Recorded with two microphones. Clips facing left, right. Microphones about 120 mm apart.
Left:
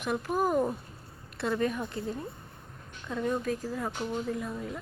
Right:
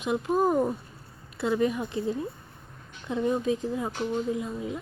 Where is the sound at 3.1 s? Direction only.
20° right (ahead or behind).